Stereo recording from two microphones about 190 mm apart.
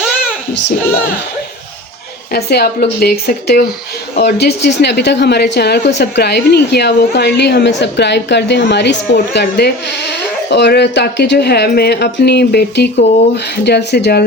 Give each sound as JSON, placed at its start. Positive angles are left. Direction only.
{"t": 2.3, "sound": "a woman's voice", "side_deg": 55}